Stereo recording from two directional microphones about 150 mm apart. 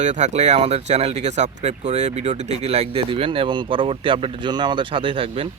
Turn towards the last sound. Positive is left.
turn(degrees=-40)  # may be behind; listen again after turning